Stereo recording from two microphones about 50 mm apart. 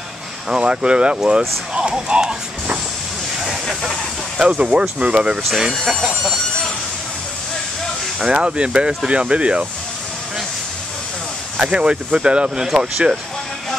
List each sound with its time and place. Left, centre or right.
0.5 s speech: centre
3.3 s a sound: centre
4.4 s speech: right
5.5 s speech: centre
8.3 s speech: centre
11.7 s speech: centre
12.6 s speech: centre